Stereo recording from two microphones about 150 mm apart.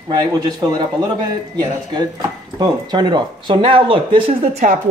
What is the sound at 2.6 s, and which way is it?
Speech, 30° right (ahead or behind).